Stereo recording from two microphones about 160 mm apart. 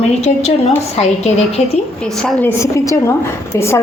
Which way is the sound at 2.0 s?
5° left (ahead or behind).